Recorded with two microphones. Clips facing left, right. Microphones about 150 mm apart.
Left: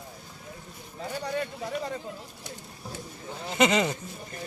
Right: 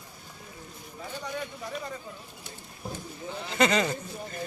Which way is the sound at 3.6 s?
20° left (ahead or behind).